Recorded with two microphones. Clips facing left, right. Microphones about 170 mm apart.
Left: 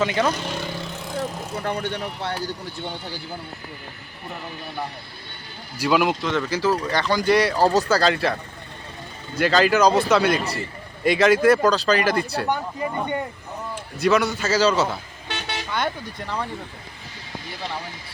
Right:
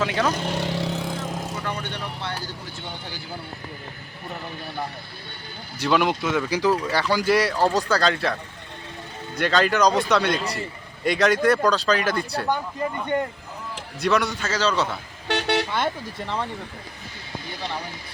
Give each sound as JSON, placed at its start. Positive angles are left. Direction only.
{"t": 0.0, "sound": "speech", "side_deg": 0}
{"t": 0.5, "sound": "vehicle", "side_deg": -75}
{"t": 1.6, "sound": "speech", "side_deg": 45}
{"t": 5.8, "sound": "speech", "side_deg": 5}
{"t": 6.2, "sound": "speech", "side_deg": -10}
{"t": 14.0, "sound": "speech", "side_deg": 0}
{"t": 15.3, "sound": "vehicle", "side_deg": -70}
{"t": 15.7, "sound": "speech", "side_deg": -5}